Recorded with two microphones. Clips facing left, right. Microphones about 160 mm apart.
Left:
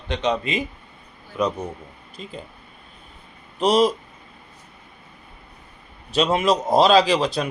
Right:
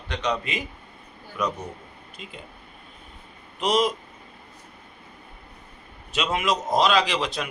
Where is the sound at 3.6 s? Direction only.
35° left (ahead or behind).